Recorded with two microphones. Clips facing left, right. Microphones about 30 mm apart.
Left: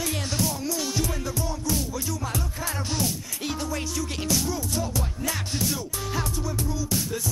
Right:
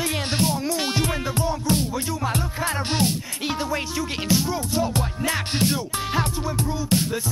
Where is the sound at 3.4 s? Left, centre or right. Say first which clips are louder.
Right 4 dB; right.